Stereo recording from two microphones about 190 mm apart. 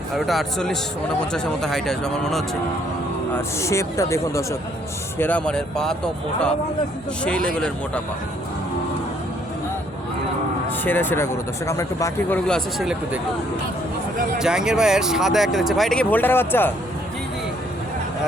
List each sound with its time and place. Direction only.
0.2 s speech: centre (ahead or behind)
3.6 s speech: 15° left (ahead or behind)
7.5 s speech: 5° left (ahead or behind)
10.8 s speech: 10° left (ahead or behind)
12.5 s speech: centre (ahead or behind)
14.3 s speech: 5° right (ahead or behind)